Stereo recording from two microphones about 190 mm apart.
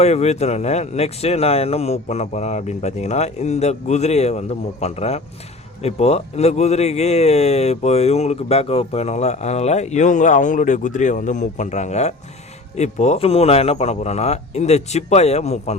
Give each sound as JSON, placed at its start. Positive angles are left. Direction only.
{"t": 0.0, "sound": "a man's voice", "side_deg": 35}